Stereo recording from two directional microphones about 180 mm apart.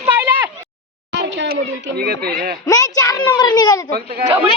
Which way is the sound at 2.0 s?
60° right (ahead or behind).